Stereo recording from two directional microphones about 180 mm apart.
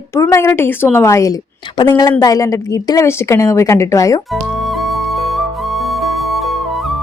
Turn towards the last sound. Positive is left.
turn(degrees=0)  # may be behind; listen again after turning